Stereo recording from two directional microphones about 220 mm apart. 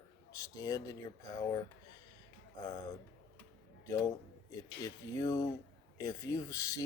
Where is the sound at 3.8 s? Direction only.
15° left (ahead or behind).